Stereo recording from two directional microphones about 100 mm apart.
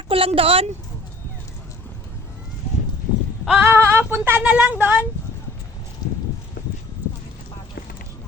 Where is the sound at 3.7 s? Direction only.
20° right (ahead or behind).